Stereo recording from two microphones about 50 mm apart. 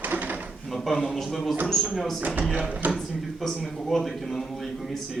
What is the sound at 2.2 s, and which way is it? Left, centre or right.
Speech, right.